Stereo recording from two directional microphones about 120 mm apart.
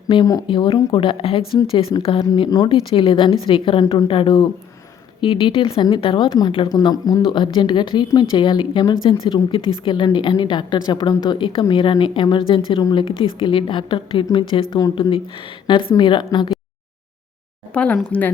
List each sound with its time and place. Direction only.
0.1 s speech: 35° left (ahead or behind)
2.6 s speech: 45° left (ahead or behind)
6.7 s speech: 30° left (ahead or behind)
17.7 s speech: 10° left (ahead or behind)